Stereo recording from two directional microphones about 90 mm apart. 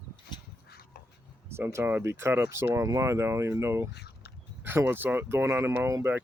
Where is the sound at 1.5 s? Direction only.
30° right (ahead or behind).